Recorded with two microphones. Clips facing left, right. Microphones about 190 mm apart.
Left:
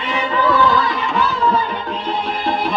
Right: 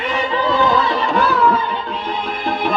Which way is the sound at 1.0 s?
35° right (ahead or behind).